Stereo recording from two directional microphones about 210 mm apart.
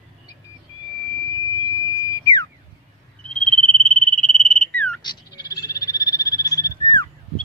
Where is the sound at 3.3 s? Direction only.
5° left (ahead or behind).